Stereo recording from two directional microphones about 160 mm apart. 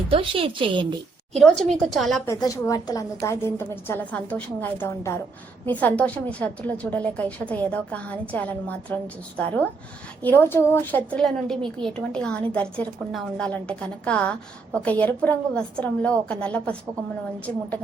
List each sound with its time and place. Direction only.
0.1 s a woman's voice: 35° right (ahead or behind)
1.4 s a woman's voice: 5° left (ahead or behind)
2.2 s a woman's voice: 20° left (ahead or behind)